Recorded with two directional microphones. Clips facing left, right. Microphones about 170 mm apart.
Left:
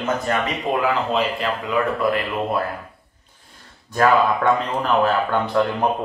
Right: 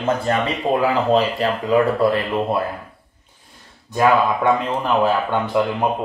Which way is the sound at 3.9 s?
15° right (ahead or behind).